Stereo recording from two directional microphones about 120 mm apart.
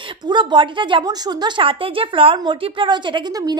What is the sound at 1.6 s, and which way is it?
A woman's voice, 50° right (ahead or behind).